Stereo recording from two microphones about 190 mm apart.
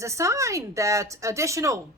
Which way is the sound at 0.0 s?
15° right (ahead or behind).